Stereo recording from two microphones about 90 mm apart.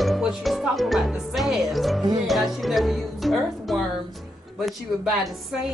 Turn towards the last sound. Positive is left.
turn(degrees=0)  # may be behind; listen again after turning